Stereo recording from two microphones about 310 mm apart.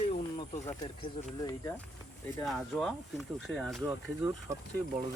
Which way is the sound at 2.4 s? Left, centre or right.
Centre.